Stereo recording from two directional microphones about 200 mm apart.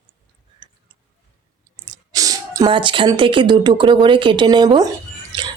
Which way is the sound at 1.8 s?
20° right (ahead or behind).